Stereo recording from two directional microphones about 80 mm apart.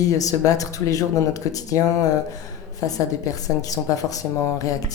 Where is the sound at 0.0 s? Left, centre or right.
Left.